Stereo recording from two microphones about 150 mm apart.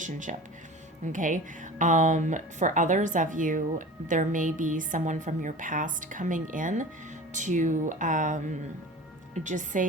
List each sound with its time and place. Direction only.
0.0 s speech: 60° right (ahead or behind)